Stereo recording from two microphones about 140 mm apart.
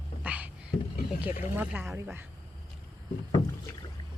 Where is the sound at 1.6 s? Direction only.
15° right (ahead or behind).